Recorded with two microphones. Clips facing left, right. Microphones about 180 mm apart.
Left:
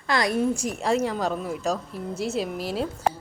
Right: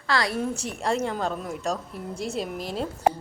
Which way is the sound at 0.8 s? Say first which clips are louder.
Right 1 dB; 5° left (ahead or behind).